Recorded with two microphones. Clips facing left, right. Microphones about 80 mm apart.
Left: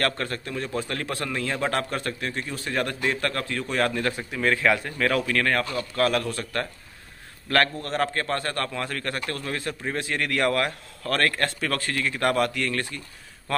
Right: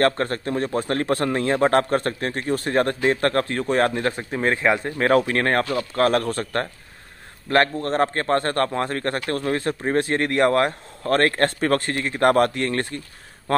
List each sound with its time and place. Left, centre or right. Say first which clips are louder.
0.0 s a man's voice: right 7 dB; right